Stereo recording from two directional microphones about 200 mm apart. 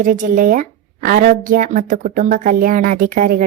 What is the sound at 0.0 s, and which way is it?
Speech, 40° right (ahead or behind).